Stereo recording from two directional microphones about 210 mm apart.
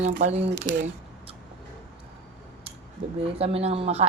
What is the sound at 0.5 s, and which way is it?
Speech, 50° right (ahead or behind).